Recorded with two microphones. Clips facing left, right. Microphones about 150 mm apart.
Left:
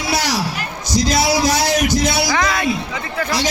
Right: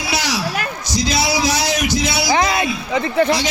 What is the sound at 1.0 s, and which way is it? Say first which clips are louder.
Music: left 2 dB; 50° left (ahead or behind).